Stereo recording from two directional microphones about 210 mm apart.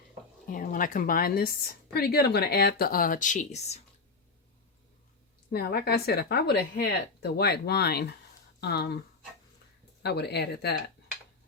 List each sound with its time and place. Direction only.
0.5 s a woman's voice: 40° left (ahead or behind)
5.5 s a woman's voice: 50° left (ahead or behind)
10.0 s a woman's voice: 50° left (ahead or behind)